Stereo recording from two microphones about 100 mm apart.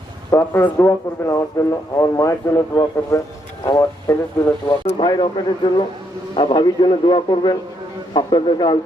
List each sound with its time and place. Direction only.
0.3 s a man's voice: 25° left (ahead or behind)
4.9 s a man's voice: 50° left (ahead or behind)